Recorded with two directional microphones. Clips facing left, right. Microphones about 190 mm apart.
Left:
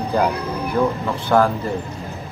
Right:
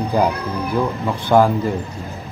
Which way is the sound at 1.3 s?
15° right (ahead or behind).